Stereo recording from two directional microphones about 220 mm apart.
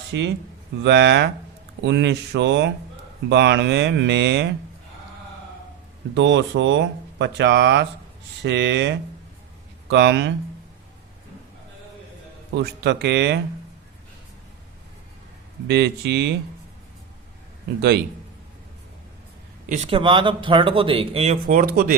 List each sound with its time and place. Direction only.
0.1 s speech: 50° right (ahead or behind)
6.1 s speech: 55° right (ahead or behind)
12.5 s speech: 50° right (ahead or behind)
15.6 s speech: 50° right (ahead or behind)
17.7 s speech: 50° right (ahead or behind)
19.6 s speech: 30° right (ahead or behind)